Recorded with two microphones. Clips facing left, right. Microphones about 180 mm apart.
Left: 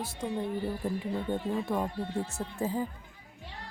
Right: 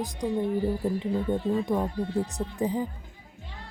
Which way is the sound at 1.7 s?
10° right (ahead or behind).